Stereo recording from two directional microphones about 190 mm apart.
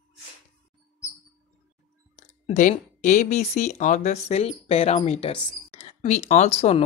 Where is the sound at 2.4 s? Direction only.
40° left (ahead or behind).